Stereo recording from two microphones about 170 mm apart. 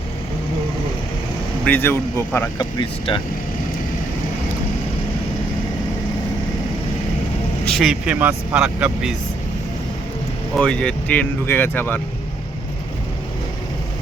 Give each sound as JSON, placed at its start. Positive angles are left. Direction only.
{"t": 1.6, "sound": "speech", "side_deg": 10}
{"t": 3.1, "sound": "speech", "side_deg": 35}
{"t": 7.7, "sound": "speech", "side_deg": 0}
{"t": 10.6, "sound": "speech", "side_deg": 5}